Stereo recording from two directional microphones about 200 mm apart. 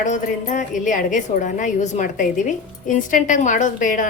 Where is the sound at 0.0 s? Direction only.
40° left (ahead or behind).